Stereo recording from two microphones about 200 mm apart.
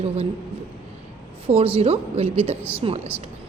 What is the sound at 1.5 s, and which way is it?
Speech, 30° right (ahead or behind).